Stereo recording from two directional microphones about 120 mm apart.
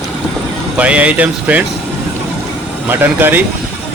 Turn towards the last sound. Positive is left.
turn(degrees=-15)  # may be behind; listen again after turning